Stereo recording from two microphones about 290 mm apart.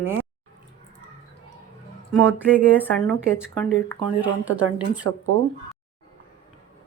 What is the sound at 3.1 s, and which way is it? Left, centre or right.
Speech, centre.